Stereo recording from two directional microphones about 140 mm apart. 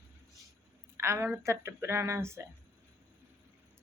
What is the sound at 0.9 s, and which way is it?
Speech, 20° right (ahead or behind).